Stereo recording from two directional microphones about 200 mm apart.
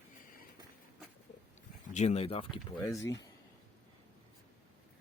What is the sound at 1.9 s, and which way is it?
Speech, 35° left (ahead or behind).